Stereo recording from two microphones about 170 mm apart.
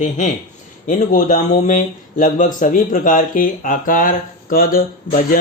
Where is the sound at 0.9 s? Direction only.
50° left (ahead or behind).